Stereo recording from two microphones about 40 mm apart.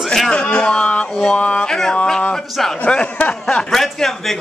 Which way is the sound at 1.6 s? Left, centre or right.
Centre.